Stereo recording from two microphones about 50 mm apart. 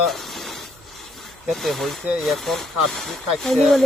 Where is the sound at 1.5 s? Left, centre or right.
Centre.